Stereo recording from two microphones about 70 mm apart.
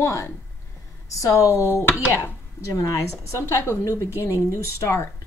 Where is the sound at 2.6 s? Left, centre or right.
Left.